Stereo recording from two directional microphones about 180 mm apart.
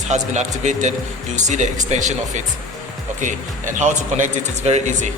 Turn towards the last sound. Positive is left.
turn(degrees=-40)  # may be behind; listen again after turning